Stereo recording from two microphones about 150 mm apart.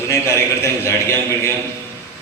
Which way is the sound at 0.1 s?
20° left (ahead or behind).